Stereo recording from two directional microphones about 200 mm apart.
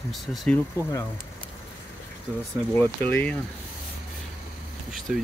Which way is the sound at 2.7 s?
10° left (ahead or behind).